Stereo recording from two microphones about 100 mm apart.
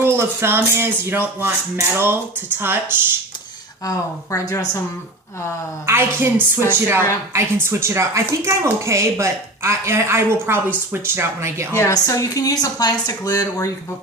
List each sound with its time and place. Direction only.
0.0 s speech: 25° right (ahead or behind)
3.8 s speech: 35° left (ahead or behind)
5.8 s speech: 25° right (ahead or behind)
11.9 s speech: 30° left (ahead or behind)